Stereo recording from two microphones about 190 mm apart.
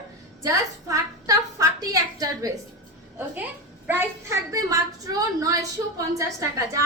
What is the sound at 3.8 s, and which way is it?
A woman's voice, 15° right (ahead or behind).